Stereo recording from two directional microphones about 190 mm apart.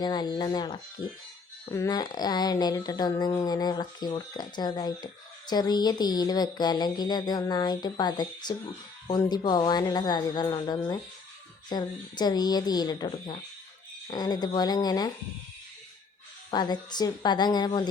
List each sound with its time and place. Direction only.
0.0 s speech: 20° left (ahead or behind)
16.5 s speech: 20° left (ahead or behind)